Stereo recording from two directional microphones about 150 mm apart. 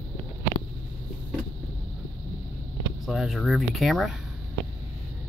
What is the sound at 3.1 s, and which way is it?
Speech, centre (ahead or behind).